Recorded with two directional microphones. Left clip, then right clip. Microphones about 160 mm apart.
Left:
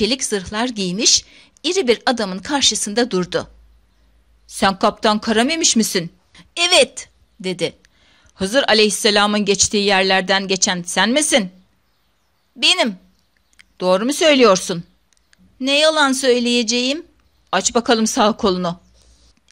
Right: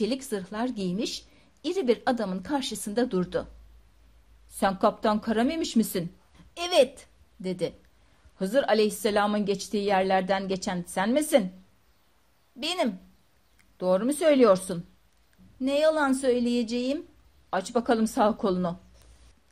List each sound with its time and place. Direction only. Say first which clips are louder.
0.0 s a woman's voice: left 10 dB; 15° left (ahead or behind)
4.6 s speech: left 8 dB; 20° left (ahead or behind)
12.5 s speech: left 13 dB; 20° left (ahead or behind)